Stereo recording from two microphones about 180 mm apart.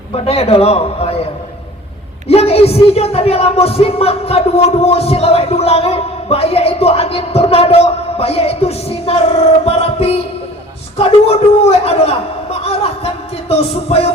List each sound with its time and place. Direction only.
0.1 s a man's voice: 35° left (ahead or behind)